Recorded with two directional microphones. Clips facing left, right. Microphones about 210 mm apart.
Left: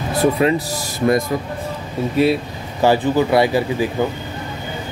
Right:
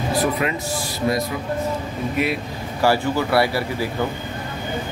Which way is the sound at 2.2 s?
30° left (ahead or behind).